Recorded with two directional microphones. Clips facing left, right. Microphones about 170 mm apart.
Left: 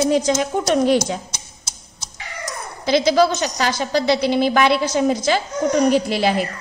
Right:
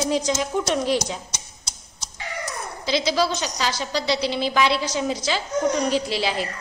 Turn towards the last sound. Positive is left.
turn(degrees=50)  # may be behind; listen again after turning